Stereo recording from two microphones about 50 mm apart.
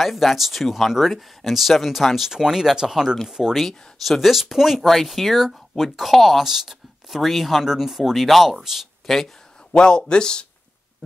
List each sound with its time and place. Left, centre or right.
0.0 s speech: centre
3.6 s speech: centre
9.7 s a man's voice: centre